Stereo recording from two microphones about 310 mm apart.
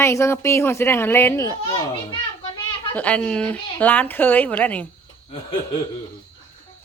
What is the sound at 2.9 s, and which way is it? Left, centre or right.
Speech, centre.